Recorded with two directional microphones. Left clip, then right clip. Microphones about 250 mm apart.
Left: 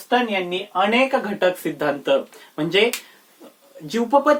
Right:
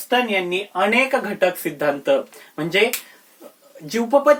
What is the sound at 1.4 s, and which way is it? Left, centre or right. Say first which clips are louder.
Speech: even; centre.